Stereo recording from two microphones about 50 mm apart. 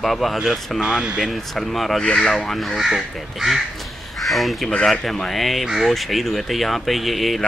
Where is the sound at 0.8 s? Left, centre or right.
Centre.